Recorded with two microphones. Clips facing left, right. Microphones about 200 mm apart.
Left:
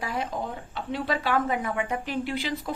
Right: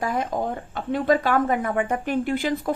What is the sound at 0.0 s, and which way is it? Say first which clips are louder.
A woman's voice: right 6 dB; 50° right (ahead or behind).